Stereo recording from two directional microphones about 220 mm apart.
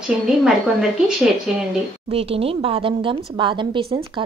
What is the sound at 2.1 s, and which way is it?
Speech, 25° right (ahead or behind).